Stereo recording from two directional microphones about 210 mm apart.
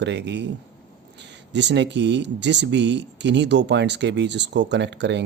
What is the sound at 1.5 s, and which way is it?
Speech, 55° right (ahead or behind).